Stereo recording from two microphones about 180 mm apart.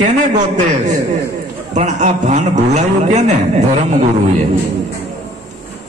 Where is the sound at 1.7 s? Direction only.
40° right (ahead or behind).